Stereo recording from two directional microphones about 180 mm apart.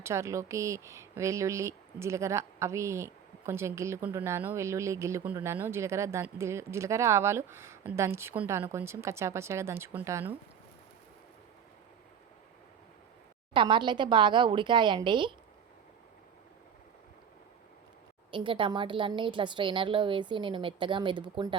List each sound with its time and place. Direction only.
0.0 s speech: 15° right (ahead or behind)
13.5 s speech: 25° right (ahead or behind)
18.3 s speech: 30° right (ahead or behind)